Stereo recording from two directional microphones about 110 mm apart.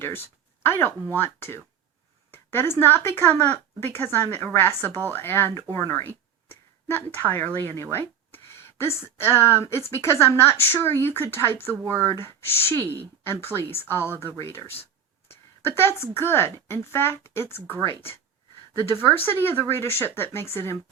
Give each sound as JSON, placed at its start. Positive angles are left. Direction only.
{"t": 0.6, "sound": "speech", "side_deg": 20}
{"t": 18.9, "sound": "speech", "side_deg": 20}